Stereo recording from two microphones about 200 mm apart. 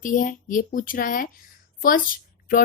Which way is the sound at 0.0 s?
40° left (ahead or behind).